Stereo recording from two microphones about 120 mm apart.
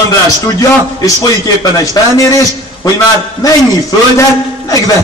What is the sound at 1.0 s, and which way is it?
A man's voice, 30° left (ahead or behind).